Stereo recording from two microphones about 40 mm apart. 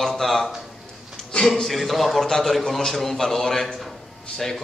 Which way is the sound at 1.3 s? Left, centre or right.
Centre.